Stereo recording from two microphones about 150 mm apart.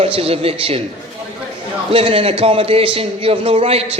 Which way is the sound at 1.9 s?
40° right (ahead or behind).